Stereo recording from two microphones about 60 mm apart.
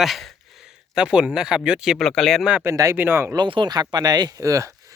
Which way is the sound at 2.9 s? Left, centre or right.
Right.